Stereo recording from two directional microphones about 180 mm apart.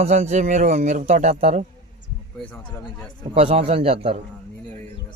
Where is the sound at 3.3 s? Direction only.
35° right (ahead or behind).